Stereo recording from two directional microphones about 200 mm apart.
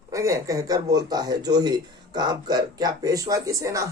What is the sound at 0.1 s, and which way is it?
Speech, 15° right (ahead or behind).